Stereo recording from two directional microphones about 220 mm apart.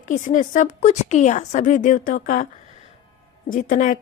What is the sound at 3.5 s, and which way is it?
Speech, 35° left (ahead or behind).